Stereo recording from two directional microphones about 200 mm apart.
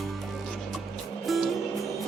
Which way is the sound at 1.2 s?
Centre (ahead or behind).